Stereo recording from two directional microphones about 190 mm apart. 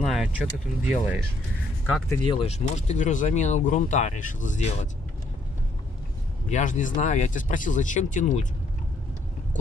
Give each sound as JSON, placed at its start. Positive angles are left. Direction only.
{"t": 0.0, "sound": "speech", "side_deg": -5}
{"t": 2.2, "sound": "speech", "side_deg": 30}
{"t": 6.5, "sound": "speech", "side_deg": 40}